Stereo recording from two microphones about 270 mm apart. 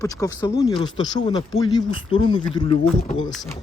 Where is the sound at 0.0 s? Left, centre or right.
Centre.